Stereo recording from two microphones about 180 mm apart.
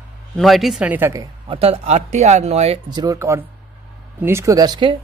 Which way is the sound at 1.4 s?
30° right (ahead or behind).